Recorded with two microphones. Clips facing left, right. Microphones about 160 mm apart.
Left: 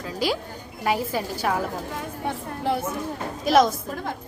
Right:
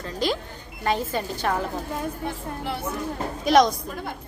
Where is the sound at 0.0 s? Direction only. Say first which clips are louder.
Even; 10° left (ahead or behind).